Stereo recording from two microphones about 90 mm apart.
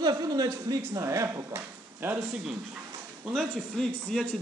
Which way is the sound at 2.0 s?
25° right (ahead or behind).